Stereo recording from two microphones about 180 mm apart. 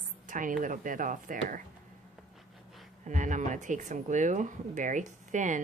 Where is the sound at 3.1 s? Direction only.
45° right (ahead or behind).